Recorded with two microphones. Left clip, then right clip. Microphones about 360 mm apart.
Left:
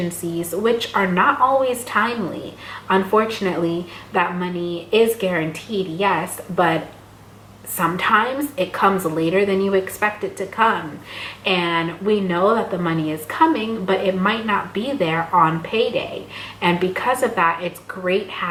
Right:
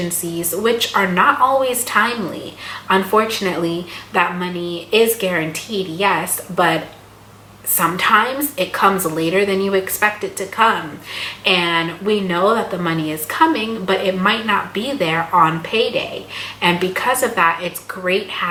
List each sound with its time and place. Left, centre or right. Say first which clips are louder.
0.0 s speech: right 2 dB; centre
1.4 s a woman's voice: right 2 dB; centre
1.6 s speech: right 3 dB; centre